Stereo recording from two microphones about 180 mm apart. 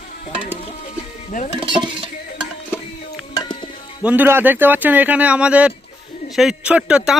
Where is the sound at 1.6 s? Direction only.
25° right (ahead or behind).